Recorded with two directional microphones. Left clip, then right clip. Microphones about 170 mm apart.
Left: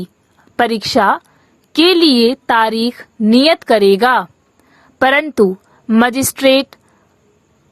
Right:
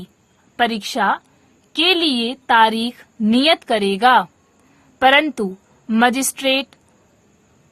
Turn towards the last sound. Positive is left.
turn(degrees=35)  # may be behind; listen again after turning